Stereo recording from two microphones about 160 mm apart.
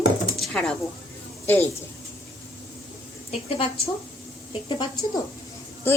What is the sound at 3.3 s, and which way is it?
Speech, 40° left (ahead or behind).